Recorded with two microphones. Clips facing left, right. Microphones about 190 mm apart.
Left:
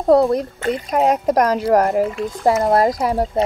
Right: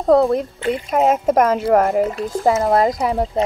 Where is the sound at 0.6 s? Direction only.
40° left (ahead or behind).